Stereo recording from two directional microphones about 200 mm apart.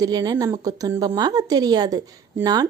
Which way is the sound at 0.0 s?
20° right (ahead or behind).